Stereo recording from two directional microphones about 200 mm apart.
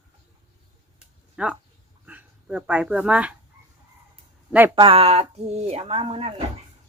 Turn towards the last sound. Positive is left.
turn(degrees=-30)  # may be behind; listen again after turning